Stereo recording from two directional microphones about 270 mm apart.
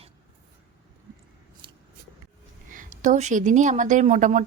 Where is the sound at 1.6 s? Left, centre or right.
Centre.